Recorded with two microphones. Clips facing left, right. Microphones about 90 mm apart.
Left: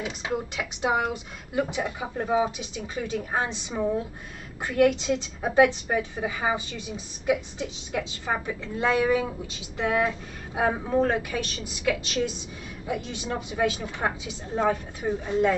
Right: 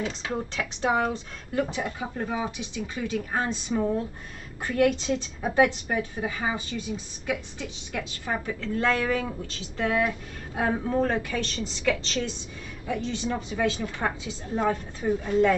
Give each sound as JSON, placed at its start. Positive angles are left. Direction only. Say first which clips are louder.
{"t": 0.0, "sound": "a woman's voice", "louder": "even", "side_deg": 10}